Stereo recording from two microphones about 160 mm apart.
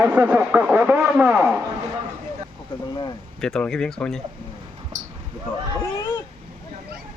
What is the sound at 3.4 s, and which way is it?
Speech, 5° left (ahead or behind).